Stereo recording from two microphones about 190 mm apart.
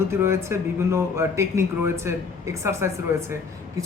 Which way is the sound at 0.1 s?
15° right (ahead or behind).